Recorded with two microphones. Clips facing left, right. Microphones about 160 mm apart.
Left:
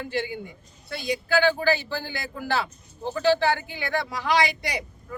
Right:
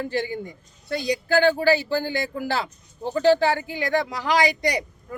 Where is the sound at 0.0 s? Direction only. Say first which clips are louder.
Right 3 dB; 40° right (ahead or behind).